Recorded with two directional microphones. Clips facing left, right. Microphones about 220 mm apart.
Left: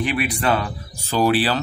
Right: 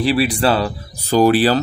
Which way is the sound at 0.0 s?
35° right (ahead or behind).